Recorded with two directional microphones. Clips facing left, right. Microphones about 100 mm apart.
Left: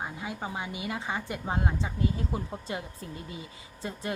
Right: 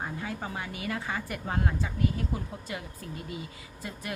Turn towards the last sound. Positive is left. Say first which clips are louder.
# left 3 dB
turn(degrees=25)  # may be behind; listen again after turning